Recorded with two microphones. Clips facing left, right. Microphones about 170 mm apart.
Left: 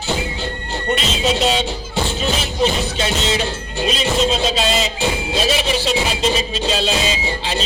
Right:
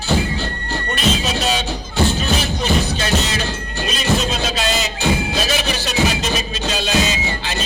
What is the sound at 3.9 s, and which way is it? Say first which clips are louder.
Speech: left 2 dB; 25° left (ahead or behind).